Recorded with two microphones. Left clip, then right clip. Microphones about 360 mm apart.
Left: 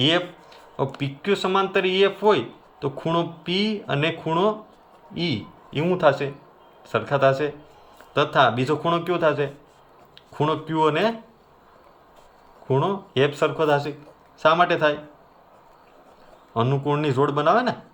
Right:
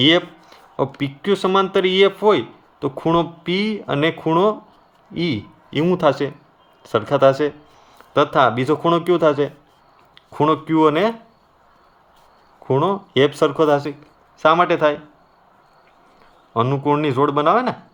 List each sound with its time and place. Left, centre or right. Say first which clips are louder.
0.0 s a sound: right 6 dB; centre
0.9 s speech: right 4 dB; centre
12.6 s speech: right 5 dB; centre
16.6 s speech: right 5 dB; centre